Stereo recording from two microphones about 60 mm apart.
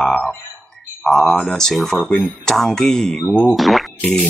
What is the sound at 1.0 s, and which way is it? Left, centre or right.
Speech, centre.